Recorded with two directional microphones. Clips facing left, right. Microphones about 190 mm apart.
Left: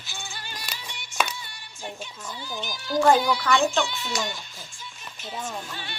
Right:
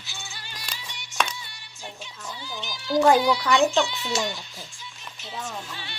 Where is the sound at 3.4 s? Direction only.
20° right (ahead or behind).